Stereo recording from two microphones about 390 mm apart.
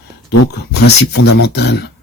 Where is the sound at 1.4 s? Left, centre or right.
Left.